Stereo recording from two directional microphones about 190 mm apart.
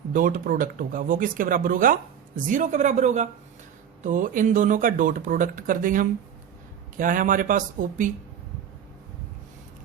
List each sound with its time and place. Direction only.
0.1 s speech: 45° right (ahead or behind)